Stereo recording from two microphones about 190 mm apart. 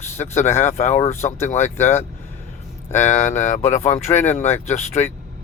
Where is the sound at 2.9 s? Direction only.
40° left (ahead or behind).